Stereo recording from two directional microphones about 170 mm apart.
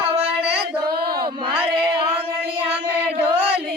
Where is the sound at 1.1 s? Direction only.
25° right (ahead or behind).